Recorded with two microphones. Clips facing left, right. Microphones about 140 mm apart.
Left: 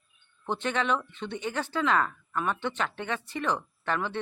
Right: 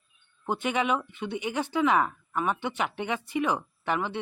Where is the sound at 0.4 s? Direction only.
10° right (ahead or behind).